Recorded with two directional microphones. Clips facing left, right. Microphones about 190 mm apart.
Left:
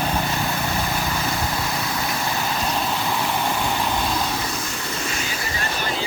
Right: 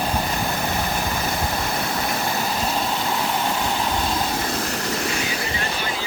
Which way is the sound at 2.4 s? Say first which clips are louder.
Even; 5° right (ahead or behind).